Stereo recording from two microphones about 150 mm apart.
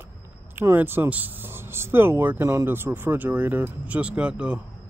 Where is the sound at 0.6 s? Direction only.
15° right (ahead or behind).